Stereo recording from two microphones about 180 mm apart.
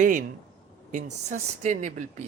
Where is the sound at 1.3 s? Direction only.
45° right (ahead or behind).